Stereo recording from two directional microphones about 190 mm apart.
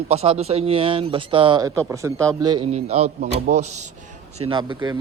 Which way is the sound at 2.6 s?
35° right (ahead or behind).